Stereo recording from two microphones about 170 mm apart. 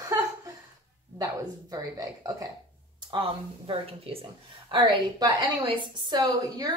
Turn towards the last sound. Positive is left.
turn(degrees=-25)  # may be behind; listen again after turning